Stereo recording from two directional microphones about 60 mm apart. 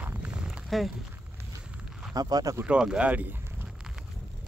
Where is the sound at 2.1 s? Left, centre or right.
Right.